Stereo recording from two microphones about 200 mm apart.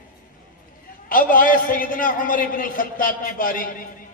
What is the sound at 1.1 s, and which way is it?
A man's voice, 45° left (ahead or behind).